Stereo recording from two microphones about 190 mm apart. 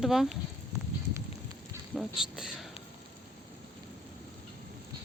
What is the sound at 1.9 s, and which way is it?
Speech, 5° right (ahead or behind).